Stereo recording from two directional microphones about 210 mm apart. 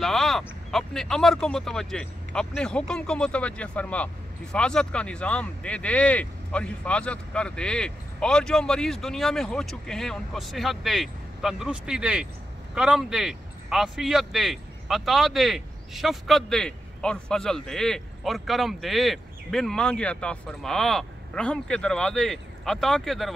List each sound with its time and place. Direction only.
0.0 s speech: centre (ahead or behind)